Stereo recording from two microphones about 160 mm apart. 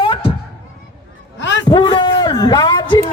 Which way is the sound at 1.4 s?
90° left.